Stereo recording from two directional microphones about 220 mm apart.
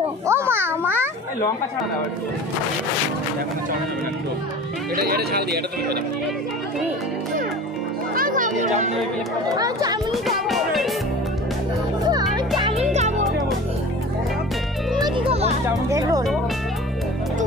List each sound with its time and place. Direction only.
0.3 s a child's voice: 10° right (ahead or behind)
4.9 s speech: 45° right (ahead or behind)
8.1 s music: 40° right (ahead or behind)
9.6 s speech: 15° right (ahead or behind)
10.1 s music: centre (ahead or behind)
12.5 s music: 20° right (ahead or behind)
15.0 s music: 25° right (ahead or behind)
15.9 s speech: 15° right (ahead or behind)